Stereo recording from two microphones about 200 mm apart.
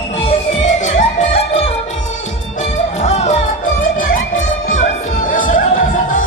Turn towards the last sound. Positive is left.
turn(degrees=40)  # may be behind; listen again after turning